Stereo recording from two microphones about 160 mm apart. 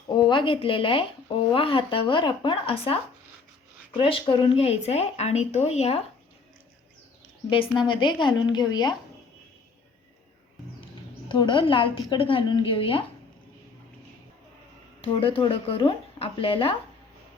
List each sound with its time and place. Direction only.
0.2 s speech: 30° left (ahead or behind)
7.8 s a woman's voice: 30° left (ahead or behind)
11.3 s speech: 30° left (ahead or behind)
15.0 s speech: 35° left (ahead or behind)